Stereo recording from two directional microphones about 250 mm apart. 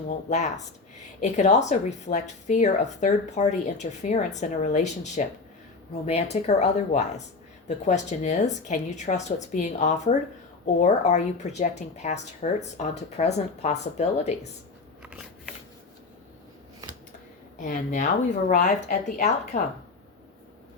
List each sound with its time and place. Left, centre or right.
0.3 s a woman's voice: left
6.3 s a woman's voice: left
15.0 s biting: centre
17.6 s speech: left